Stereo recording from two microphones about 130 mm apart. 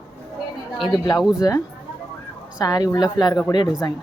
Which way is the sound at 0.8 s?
35° left (ahead or behind).